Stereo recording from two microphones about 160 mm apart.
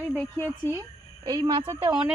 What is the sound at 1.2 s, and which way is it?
Speech, 25° right (ahead or behind).